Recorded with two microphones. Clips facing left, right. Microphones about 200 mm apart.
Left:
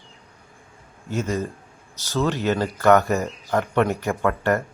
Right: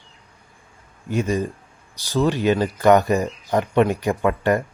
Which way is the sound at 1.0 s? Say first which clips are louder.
Right 3 dB; 15° right (ahead or behind).